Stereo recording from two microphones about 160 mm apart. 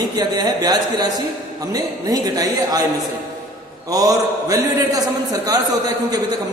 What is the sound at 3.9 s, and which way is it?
A man's voice, 20° right (ahead or behind).